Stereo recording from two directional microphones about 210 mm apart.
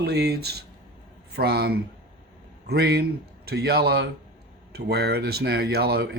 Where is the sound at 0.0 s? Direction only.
50° right (ahead or behind).